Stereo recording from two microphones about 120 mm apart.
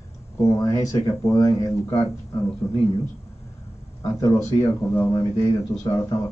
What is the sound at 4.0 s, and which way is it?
A woman's voice, 25° left (ahead or behind).